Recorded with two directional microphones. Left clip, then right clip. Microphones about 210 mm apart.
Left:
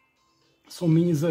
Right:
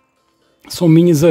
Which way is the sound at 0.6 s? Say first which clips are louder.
Right 12 dB; 35° right (ahead or behind).